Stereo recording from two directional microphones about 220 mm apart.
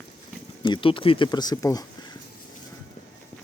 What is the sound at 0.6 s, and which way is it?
Speech, 20° left (ahead or behind).